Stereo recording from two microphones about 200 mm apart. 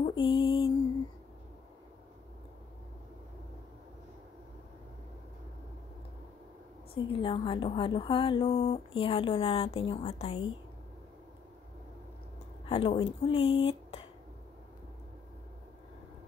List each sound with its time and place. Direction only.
0.0 s mantra: 25° left (ahead or behind)
7.1 s speech: 25° left (ahead or behind)
12.6 s speech: 25° left (ahead or behind)
13.4 s speech: 75° left (ahead or behind)
13.7 s a sound: 30° left (ahead or behind)